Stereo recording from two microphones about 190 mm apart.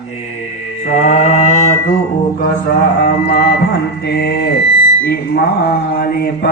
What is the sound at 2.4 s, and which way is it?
Mantra, 50° left (ahead or behind).